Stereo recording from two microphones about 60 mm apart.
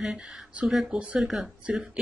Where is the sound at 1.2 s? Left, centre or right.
Centre.